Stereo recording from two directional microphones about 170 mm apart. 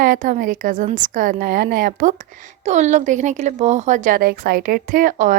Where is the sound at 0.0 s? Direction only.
50° right (ahead or behind).